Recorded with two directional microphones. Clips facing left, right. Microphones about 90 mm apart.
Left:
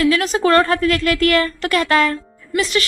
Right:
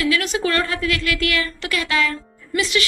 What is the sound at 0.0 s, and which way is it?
A woman's voice, 40° left (ahead or behind).